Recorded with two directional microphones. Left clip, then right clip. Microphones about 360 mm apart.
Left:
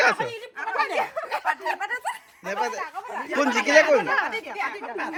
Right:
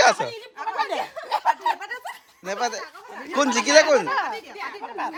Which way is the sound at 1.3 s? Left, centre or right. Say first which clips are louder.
Right 8 dB; centre.